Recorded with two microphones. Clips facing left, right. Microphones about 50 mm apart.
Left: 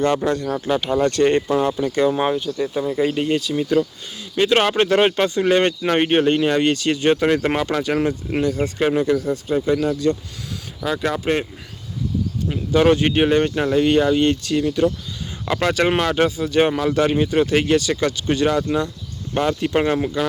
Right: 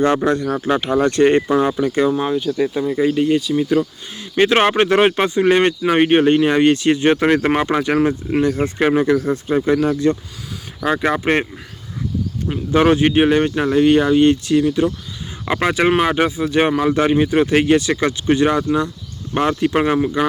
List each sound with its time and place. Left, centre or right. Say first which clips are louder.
0.0 s speech: right 3 dB; right
2.7 s speech: even; centre
4.2 s speech: right 3 dB; right
12.7 s speech: right 2 dB; right
19.5 s speech: right 3 dB; centre